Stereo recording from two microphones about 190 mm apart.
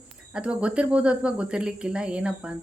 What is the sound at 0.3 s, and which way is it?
A woman's voice, 5° right (ahead or behind).